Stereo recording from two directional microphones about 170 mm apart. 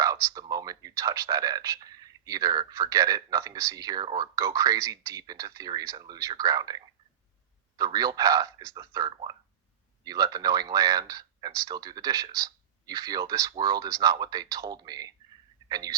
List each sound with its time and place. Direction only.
0.0 s speech: 20° right (ahead or behind)